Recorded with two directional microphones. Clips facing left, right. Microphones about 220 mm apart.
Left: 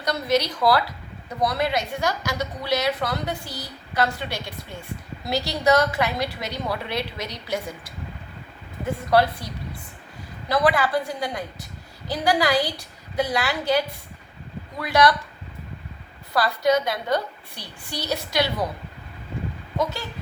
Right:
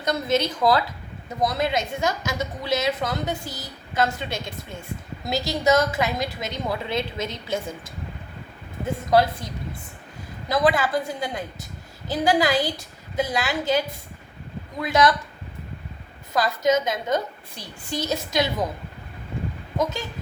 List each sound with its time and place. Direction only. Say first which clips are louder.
0.0 s a woman's voice: even; 25° right (ahead or behind)
9.0 s a woman's voice: even; 20° right (ahead or behind)
10.5 s a woman's voice: even; 20° right (ahead or behind)
16.3 s a woman's voice: even; 20° right (ahead or behind)
17.6 s a woman's voice: right 4 dB; 45° right (ahead or behind)
18.1 s a woman's voice: left 1 dB; 20° right (ahead or behind)
19.7 s a woman's voice: right 1 dB; 20° right (ahead or behind)